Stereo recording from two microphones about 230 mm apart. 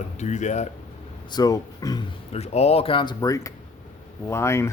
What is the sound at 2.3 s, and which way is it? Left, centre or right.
Speech, left.